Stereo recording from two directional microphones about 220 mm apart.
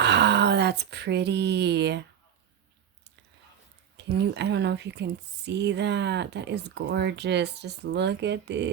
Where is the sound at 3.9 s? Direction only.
50° right (ahead or behind).